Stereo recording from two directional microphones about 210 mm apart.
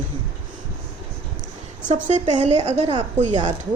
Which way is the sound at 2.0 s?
35° right (ahead or behind).